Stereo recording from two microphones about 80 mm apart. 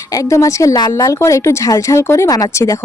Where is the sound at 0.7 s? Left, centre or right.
Left.